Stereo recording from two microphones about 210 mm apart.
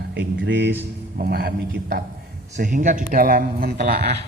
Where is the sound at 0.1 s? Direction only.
55° right (ahead or behind).